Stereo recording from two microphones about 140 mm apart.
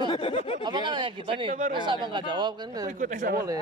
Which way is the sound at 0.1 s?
45° left (ahead or behind).